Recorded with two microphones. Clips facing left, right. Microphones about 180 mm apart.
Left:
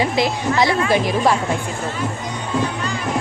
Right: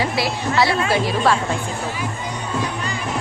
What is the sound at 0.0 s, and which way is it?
Speech, 20° left (ahead or behind).